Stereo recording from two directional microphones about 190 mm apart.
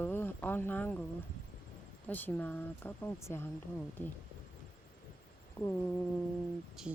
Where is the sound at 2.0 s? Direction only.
10° left (ahead or behind).